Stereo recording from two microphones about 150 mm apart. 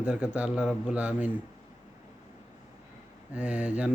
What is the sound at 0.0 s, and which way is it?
Speech, 5° right (ahead or behind).